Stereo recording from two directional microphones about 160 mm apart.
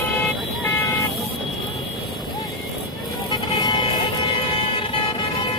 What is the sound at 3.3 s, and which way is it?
Vehicle, 30° left (ahead or behind).